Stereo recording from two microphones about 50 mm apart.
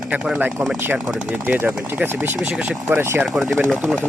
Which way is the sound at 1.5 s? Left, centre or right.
Right.